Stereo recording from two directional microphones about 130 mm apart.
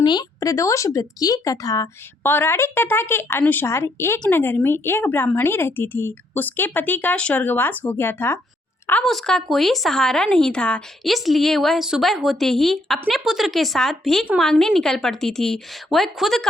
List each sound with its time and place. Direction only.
0.0 s a woman's voice: 35° left (ahead or behind); by 8.4 s 15° left (ahead or behind)
9.0 s speech: 5° left (ahead or behind)